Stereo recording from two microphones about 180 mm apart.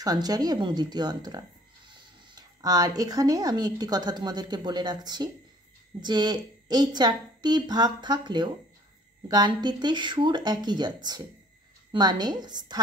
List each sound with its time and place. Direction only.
0.0 s a woman's voice: 20° right (ahead or behind)